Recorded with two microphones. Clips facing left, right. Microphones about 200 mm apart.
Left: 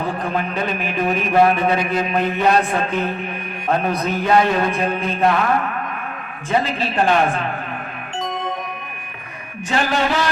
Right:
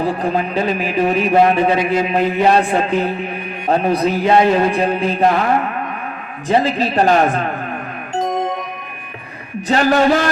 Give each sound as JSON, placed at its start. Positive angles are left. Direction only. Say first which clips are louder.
{"t": 0.0, "sound": "a man's voice", "louder": "right 4 dB", "side_deg": -30}
{"t": 6.5, "sound": "a man's voice", "louder": "right 5 dB", "side_deg": -35}
{"t": 9.6, "sound": "a man's voice", "louder": "right 7 dB", "side_deg": -40}